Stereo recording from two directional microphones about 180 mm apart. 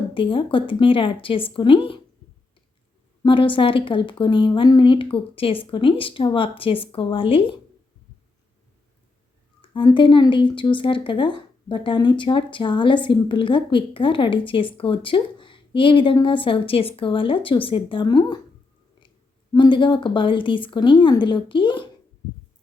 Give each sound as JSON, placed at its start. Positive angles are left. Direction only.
{"t": 0.1, "sound": "speech", "side_deg": 30}
{"t": 3.2, "sound": "speech", "side_deg": 30}
{"t": 9.6, "sound": "speech", "side_deg": 25}
{"t": 19.5, "sound": "speech", "side_deg": 25}